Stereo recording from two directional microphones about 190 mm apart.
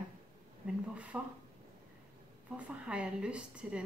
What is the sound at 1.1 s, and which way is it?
Speech, 10° right (ahead or behind).